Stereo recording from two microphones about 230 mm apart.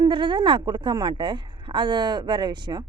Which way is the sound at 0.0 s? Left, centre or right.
Right.